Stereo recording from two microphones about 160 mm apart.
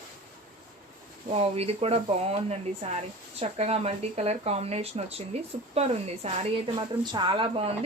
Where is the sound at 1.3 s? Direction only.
40° right (ahead or behind).